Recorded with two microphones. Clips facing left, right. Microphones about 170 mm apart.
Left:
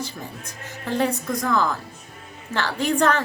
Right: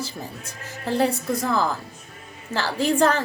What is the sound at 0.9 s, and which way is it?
A woman's voice, 35° right (ahead or behind).